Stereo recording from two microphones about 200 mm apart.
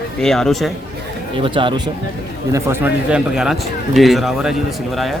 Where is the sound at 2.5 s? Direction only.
10° right (ahead or behind).